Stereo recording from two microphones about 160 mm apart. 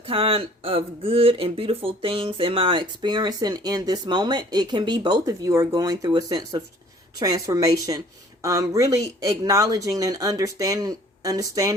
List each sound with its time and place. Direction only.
0.1 s speech: 35° right (ahead or behind)